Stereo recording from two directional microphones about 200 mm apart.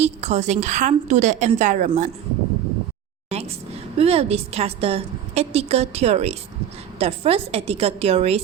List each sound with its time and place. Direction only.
0.0 s a woman's voice: 35° right (ahead or behind)
3.2 s a sound: 30° right (ahead or behind)
3.9 s a woman's voice: 30° right (ahead or behind)